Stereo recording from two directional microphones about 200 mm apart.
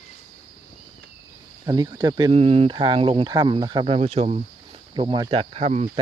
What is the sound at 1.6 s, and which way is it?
Speech, 20° right (ahead or behind).